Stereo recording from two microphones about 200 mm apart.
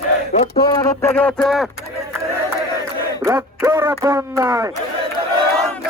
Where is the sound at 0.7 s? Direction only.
20° left (ahead or behind).